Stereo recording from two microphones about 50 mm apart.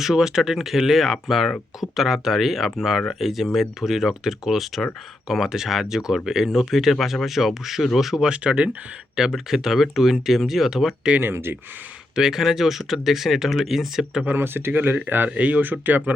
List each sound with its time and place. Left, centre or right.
0.0 s speech: centre
8.2 s speech: centre
9.1 s speech: centre
11.2 s speech: right
12.1 s speech: centre
14.3 s speech: right
14.7 s speech: right